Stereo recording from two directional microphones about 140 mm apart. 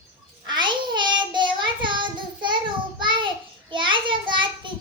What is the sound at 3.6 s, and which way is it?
Child singing, 35° right (ahead or behind).